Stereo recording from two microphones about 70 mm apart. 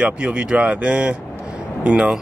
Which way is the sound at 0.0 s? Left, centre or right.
Centre.